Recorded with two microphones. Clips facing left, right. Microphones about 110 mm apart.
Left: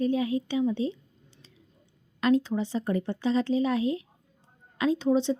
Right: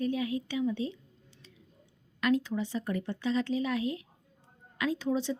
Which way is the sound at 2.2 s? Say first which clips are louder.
Left 4 dB; 30° left (ahead or behind).